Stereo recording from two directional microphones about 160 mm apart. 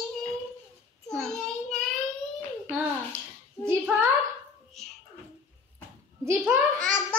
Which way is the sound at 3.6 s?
10° right (ahead or behind).